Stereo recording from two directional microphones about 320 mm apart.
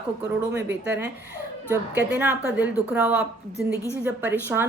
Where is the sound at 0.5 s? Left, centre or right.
Right.